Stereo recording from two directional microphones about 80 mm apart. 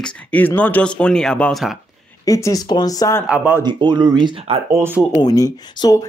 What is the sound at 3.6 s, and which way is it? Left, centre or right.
Speech, right.